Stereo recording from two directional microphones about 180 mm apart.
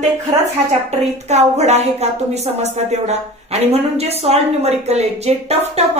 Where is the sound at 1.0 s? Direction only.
40° right (ahead or behind).